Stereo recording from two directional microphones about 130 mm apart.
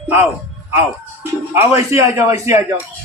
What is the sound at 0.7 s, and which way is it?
A man's voice, 20° right (ahead or behind).